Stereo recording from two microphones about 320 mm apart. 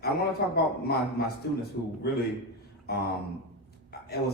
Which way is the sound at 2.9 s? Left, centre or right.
Left.